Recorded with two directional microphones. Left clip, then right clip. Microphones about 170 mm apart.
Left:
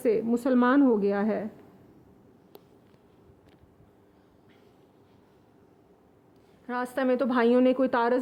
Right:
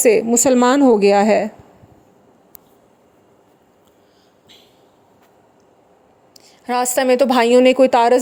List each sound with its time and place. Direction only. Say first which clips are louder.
0.0 s a woman's voice: right 12 dB; 35° right (ahead or behind)
6.7 s a woman's voice: right 12 dB; 40° right (ahead or behind)